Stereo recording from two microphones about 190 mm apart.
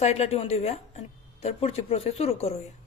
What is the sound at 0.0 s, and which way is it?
A woman's voice, 35° left (ahead or behind).